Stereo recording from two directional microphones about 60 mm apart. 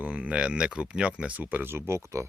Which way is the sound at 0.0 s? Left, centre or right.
Right.